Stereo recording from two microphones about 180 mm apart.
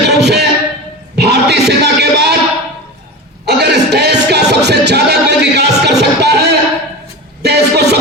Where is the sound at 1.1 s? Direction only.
65° right (ahead or behind).